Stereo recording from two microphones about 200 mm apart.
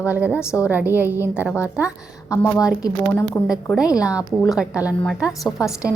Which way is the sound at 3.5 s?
5° right (ahead or behind).